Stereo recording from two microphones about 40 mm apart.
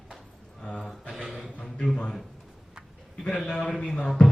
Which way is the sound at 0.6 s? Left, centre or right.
Left.